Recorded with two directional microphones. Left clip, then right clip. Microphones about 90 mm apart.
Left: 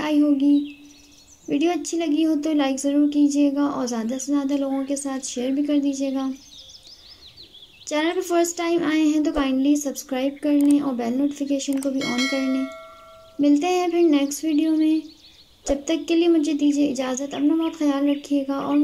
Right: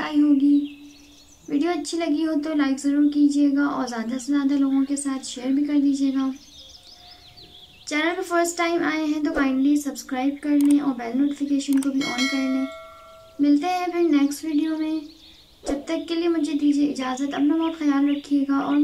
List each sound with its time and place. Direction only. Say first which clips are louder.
0.0 s a sound: even; 35° left (ahead or behind)
1.4 s speech: left 2 dB; 35° left (ahead or behind)
7.8 s speech: left 1 dB; 40° left (ahead or behind)
8.5 s music: left 1 dB; 40° left (ahead or behind)
10.8 s speech: even; 45° left (ahead or behind)
12.0 s speech: left 1 dB; centre (ahead or behind)
13.4 s music: left 2 dB; 45° left (ahead or behind)
14.1 s speech: left 1 dB; 35° left (ahead or behind)
15.7 s music: left 4 dB; 45° left (ahead or behind)